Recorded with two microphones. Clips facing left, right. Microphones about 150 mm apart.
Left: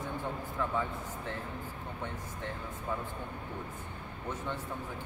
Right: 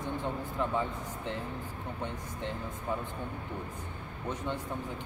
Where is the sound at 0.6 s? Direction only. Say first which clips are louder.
Right 1 dB; 20° right (ahead or behind).